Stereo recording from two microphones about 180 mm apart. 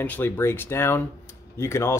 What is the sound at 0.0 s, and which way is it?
Speech, 10° left (ahead or behind).